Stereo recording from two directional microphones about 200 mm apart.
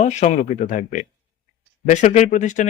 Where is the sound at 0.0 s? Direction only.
35° left (ahead or behind).